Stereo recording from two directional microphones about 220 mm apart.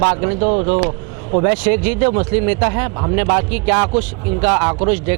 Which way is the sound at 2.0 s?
20° right (ahead or behind).